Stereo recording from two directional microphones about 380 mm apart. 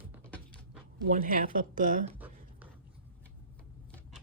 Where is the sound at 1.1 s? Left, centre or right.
Right.